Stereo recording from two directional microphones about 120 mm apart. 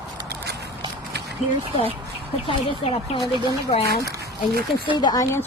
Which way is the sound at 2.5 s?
45° left (ahead or behind).